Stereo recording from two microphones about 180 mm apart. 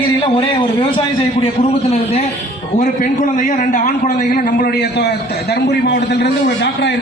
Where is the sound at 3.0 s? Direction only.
50° left (ahead or behind).